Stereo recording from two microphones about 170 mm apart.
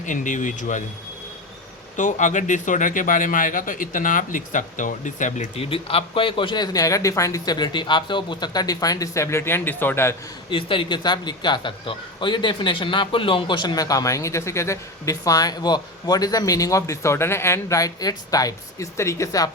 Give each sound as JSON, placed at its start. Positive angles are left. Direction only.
{"t": 0.0, "sound": "speech", "side_deg": 50}
{"t": 2.0, "sound": "speech", "side_deg": 45}
{"t": 10.5, "sound": "speech", "side_deg": 30}